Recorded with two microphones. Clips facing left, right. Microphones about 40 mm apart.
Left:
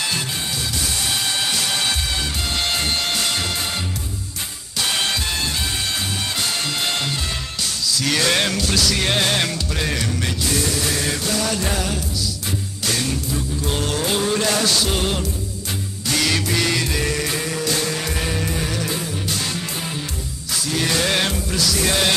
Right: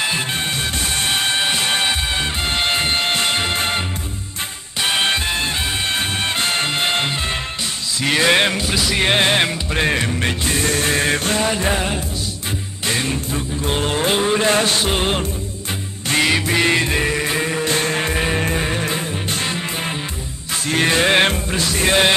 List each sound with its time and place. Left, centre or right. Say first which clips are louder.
0.9 s music: right 5 dB; right
7.9 s speech: right 4 dB; right
8.6 s music: right 2 dB; right